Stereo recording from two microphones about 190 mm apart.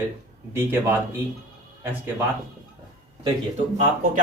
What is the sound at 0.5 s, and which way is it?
Speech, 10° right (ahead or behind).